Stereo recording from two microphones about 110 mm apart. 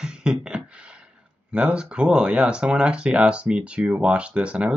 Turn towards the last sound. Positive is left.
turn(degrees=-10)  # may be behind; listen again after turning